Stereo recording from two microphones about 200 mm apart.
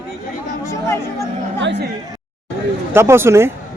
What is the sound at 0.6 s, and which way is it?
Chatter, 15° left (ahead or behind).